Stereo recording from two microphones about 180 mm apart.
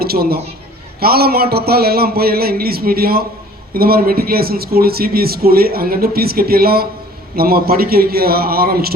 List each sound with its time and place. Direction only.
0.0 s a man's voice: 60° right (ahead or behind)